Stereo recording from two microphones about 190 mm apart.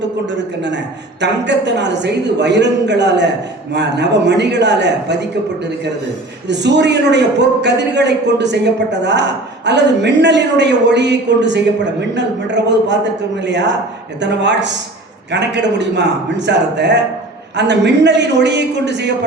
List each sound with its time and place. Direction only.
0.3 s a man's voice: 70° right (ahead or behind)
6.5 s a man's voice: 65° right (ahead or behind)